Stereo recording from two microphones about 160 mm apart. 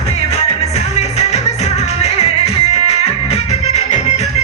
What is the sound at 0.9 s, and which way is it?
Music, 40° left (ahead or behind).